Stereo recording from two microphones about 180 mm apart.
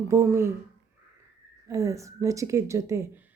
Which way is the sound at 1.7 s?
15° right (ahead or behind).